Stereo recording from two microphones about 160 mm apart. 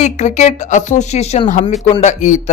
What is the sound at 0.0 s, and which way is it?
Speech, 45° left (ahead or behind).